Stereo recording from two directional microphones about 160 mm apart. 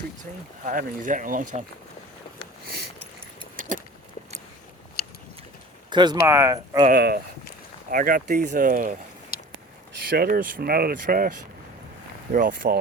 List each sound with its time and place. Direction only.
0.2 s speech: 55° right (ahead or behind)
3.6 s keys jangling: 60° right (ahead or behind)
5.0 s a sound: 80° left
5.9 s speech: 30° right (ahead or behind)
6.8 s speech: 75° right (ahead or behind)
7.9 s speech: 60° right (ahead or behind)
10.1 s speech: 70° right (ahead or behind)